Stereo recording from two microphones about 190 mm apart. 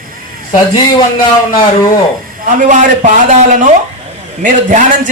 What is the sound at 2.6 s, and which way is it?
A man's voice, 40° right (ahead or behind).